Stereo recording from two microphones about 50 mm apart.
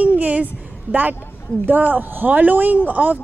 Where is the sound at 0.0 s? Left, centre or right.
Right.